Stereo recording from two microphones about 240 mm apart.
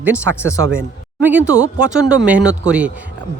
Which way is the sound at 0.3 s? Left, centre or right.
Right.